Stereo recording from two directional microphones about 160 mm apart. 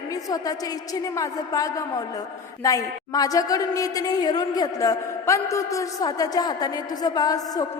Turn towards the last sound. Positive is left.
turn(degrees=25)  # may be behind; listen again after turning